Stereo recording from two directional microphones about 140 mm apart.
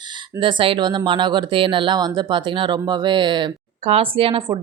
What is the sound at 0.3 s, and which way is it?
Speech, 40° right (ahead or behind).